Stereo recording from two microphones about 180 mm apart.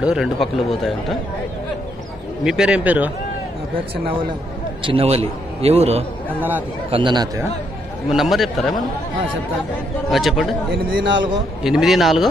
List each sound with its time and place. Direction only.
0.0 s speech: 5° right (ahead or behind)
2.4 s speech: 5° right (ahead or behind)
4.8 s a man's voice: 35° right (ahead or behind)
8.1 s speech: centre (ahead or behind)
10.0 s speech: centre (ahead or behind)
10.7 s a man's voice: 90° right
11.6 s speech: centre (ahead or behind)